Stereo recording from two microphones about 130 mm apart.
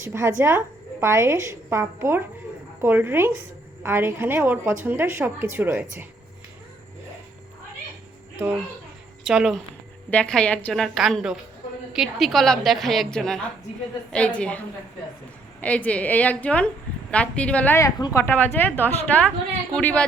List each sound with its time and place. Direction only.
0.0 s a woman's voice: 20° right (ahead or behind)
9.2 s a woman's voice: 5° right (ahead or behind)
10.1 s a woman's voice: 10° left (ahead or behind)
15.6 s a woman's voice: 10° left (ahead or behind)
17.7 s a woman's voice: 25° left (ahead or behind); by 20.1 s 10° left (ahead or behind)